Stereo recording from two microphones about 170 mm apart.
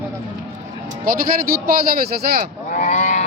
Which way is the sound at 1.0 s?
60° right (ahead or behind).